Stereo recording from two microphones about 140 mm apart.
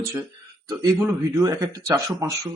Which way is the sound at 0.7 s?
25° right (ahead or behind).